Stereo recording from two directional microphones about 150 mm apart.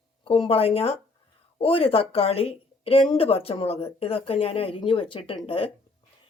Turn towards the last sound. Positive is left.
turn(degrees=40)  # may be behind; listen again after turning